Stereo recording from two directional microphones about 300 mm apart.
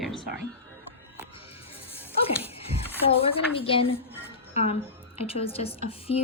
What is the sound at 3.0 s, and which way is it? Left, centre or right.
Speech, centre.